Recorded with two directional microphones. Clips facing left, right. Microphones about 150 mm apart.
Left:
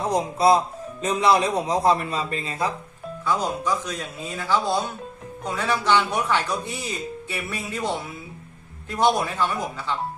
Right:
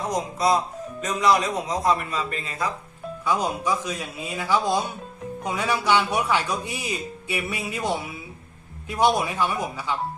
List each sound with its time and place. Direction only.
0.1 s a man's voice: 30° left (ahead or behind)
3.2 s a man's voice: 10° right (ahead or behind)